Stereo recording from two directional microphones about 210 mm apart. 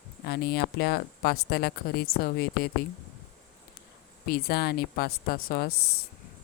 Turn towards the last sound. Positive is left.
turn(degrees=45)  # may be behind; listen again after turning